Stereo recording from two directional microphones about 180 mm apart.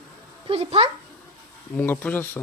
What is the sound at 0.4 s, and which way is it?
Speech, 30° right (ahead or behind).